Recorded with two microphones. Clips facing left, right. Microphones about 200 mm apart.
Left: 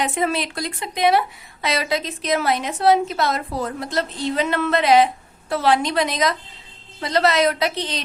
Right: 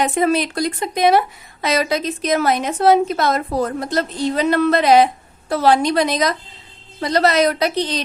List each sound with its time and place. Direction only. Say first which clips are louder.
0.0 s a woman's voice: right 5 dB; 45° right (ahead or behind)